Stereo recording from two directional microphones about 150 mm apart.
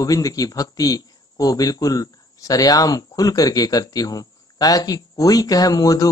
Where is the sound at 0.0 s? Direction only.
25° left (ahead or behind).